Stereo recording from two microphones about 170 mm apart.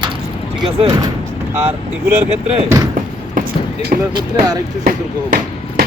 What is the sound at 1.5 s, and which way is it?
Speech, 15° right (ahead or behind).